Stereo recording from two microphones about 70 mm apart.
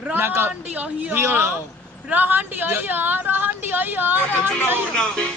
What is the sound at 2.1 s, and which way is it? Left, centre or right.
A woman's voice, right.